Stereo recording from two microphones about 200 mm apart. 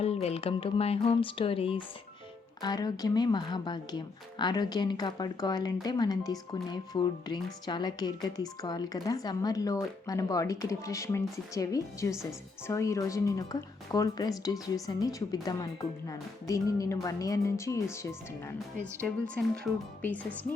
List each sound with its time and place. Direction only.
0.0 s speech: 30° left (ahead or behind); by 19.4 s 5° left (ahead or behind)